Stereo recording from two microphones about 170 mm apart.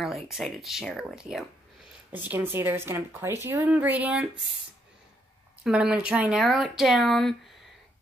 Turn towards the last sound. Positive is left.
turn(degrees=0)  # may be behind; listen again after turning